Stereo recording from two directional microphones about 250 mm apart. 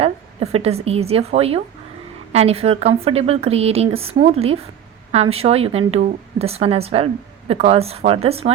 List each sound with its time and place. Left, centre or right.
0.0 s a woman's voice: right